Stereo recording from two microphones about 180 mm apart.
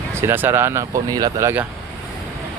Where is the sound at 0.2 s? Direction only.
10° right (ahead or behind).